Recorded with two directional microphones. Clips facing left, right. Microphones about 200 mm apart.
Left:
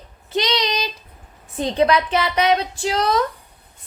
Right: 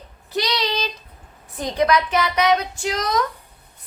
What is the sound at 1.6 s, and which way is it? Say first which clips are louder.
A woman's voice: left 2 dB; 25° left (ahead or behind).